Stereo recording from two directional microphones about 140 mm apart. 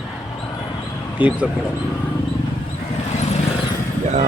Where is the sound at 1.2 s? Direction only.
10° right (ahead or behind).